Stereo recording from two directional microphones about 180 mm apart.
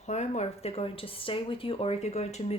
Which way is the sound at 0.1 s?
40° left (ahead or behind).